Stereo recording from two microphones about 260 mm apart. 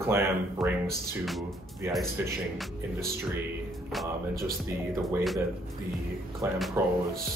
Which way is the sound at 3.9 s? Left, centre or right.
Centre.